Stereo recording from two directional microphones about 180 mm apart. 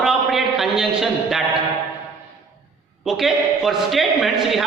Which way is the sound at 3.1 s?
Centre (ahead or behind).